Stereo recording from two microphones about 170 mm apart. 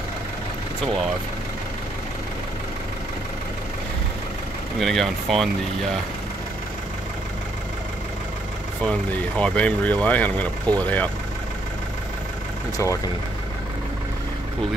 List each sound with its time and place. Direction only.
4.7 s speech: centre (ahead or behind)
8.8 s speech: 5° left (ahead or behind)
12.7 s speech: 20° left (ahead or behind)